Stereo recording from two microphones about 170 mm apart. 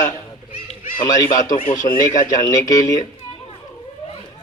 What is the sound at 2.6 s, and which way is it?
Speech, 20° left (ahead or behind).